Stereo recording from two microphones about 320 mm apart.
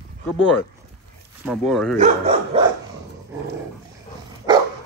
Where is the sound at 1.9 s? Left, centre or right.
Right.